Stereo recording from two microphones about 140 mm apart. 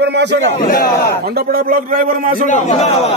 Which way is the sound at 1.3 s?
90° right.